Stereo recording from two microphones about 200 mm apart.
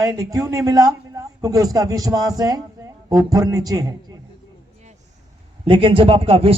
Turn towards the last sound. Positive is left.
turn(degrees=-30)  # may be behind; listen again after turning